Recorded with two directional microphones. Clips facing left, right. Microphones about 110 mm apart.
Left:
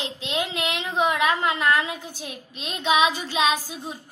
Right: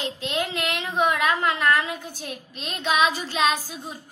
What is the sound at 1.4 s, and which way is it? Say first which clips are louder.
Speech: even; 5° left (ahead or behind).